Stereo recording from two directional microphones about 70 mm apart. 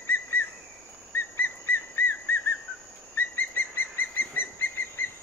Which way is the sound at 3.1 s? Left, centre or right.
Left.